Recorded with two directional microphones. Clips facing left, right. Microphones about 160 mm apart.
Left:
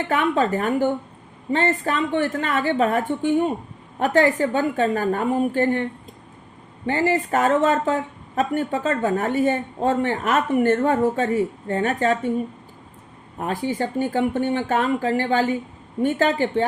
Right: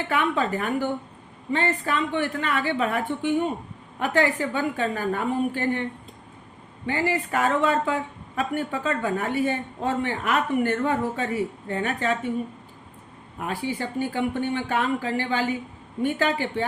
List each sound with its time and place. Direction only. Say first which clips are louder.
0.1 s speech: left 4 dB; 45° left (ahead or behind)
6.8 s speech: left 4 dB; 45° left (ahead or behind)
13.4 s speech: left 5 dB; 45° left (ahead or behind)